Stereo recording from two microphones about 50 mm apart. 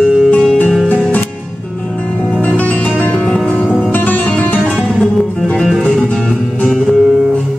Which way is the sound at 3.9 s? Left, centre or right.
Left.